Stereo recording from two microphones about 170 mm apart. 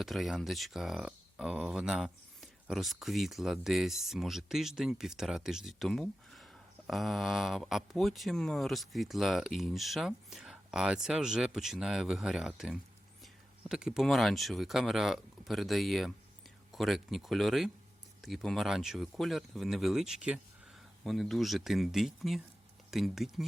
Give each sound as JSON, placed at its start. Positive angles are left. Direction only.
{"t": 0.0, "sound": "speech", "side_deg": 0}